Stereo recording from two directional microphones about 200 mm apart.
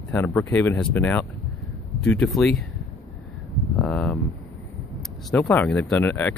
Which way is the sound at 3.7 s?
5° left (ahead or behind).